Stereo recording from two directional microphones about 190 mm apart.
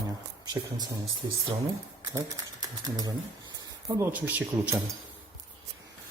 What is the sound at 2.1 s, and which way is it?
Speech, 20° right (ahead or behind).